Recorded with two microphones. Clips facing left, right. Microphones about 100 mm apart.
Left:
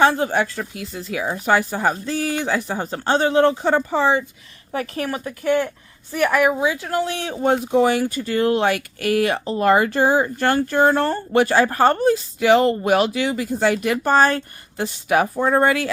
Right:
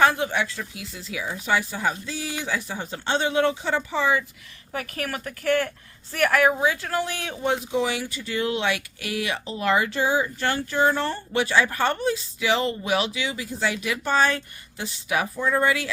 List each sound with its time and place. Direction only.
0.0 s speech: 30° left (ahead or behind)
0.3 s speech: 45° left (ahead or behind)
4.0 s a woman's voice: 35° left (ahead or behind)
7.4 s speech: 50° left (ahead or behind)